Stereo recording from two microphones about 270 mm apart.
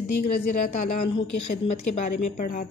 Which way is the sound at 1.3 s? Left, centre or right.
Left.